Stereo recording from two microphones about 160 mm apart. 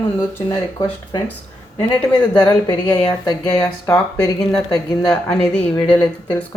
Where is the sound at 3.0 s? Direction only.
25° left (ahead or behind).